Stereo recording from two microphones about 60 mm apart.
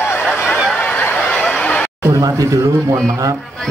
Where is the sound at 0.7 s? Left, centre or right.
Left.